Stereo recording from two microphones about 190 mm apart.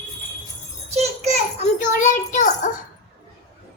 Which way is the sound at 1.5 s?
40° left (ahead or behind).